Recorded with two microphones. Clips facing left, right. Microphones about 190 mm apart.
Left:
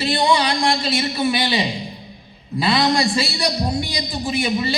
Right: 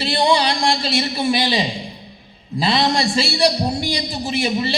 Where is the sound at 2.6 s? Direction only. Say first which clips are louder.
Even; 30° right (ahead or behind).